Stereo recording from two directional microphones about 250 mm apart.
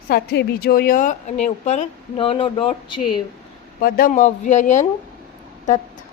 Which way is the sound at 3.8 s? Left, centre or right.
Left.